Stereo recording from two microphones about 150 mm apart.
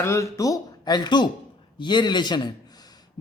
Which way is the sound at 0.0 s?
20° left (ahead or behind).